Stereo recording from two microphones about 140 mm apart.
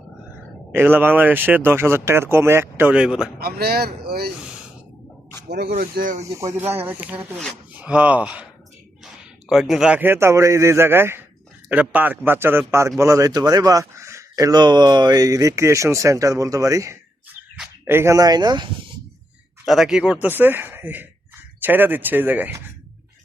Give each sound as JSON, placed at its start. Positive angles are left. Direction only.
{"t": 0.7, "sound": "speech", "side_deg": -15}
{"t": 3.4, "sound": "speech", "side_deg": -90}
{"t": 5.7, "sound": "speech", "side_deg": -90}
{"t": 6.2, "sound": "speech", "side_deg": -25}
{"t": 9.5, "sound": "speech", "side_deg": -5}
{"t": 19.6, "sound": "speech", "side_deg": 0}